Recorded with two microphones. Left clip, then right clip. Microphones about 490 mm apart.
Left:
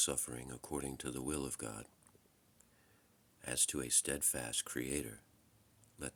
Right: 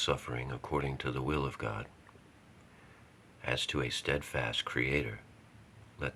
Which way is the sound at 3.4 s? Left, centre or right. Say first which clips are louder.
Right 7 dB; left.